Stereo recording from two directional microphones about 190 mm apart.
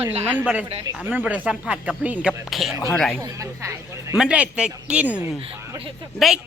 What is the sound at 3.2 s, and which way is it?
Speech, 15° right (ahead or behind).